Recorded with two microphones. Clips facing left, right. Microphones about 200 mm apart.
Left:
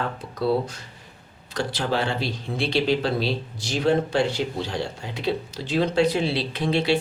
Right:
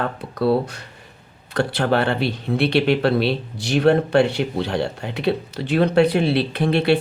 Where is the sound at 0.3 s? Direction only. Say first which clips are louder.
Right 4 dB; 60° right (ahead or behind).